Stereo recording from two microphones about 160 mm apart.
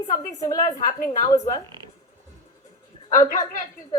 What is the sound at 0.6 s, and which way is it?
Speech, 50° left (ahead or behind).